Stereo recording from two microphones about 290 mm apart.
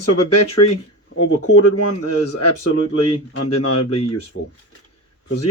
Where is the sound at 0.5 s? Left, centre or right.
Left.